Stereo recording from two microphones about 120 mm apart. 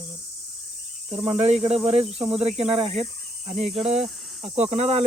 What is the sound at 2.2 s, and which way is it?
Speech, 5° right (ahead or behind).